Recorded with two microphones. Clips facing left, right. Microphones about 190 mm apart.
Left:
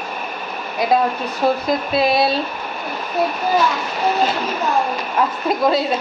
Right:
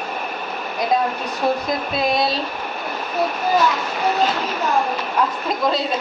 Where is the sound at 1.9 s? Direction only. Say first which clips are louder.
Left 4 dB; 5° left (ahead or behind).